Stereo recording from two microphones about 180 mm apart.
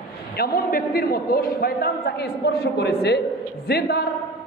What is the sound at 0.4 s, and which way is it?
A woman's voice, 55° left (ahead or behind).